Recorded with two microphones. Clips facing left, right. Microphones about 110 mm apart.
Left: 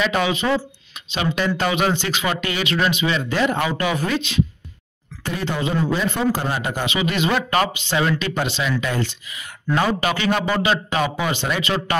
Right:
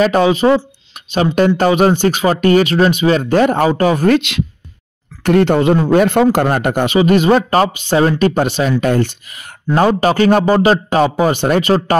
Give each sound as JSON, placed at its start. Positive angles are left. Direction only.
{"t": 0.0, "sound": "a man's voice", "side_deg": -40}
{"t": 4.1, "sound": "speech", "side_deg": -70}
{"t": 7.0, "sound": "a man's voice", "side_deg": -40}